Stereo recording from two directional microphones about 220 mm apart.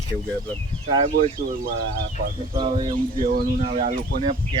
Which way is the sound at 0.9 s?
30° right (ahead or behind).